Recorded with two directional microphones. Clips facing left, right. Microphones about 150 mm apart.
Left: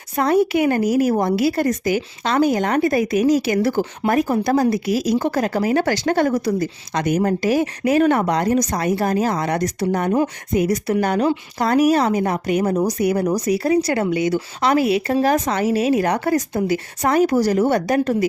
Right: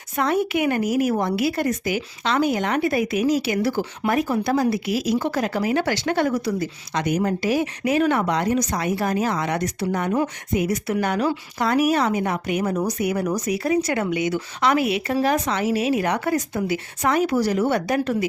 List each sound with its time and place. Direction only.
0.2 s speech: 35° left (ahead or behind)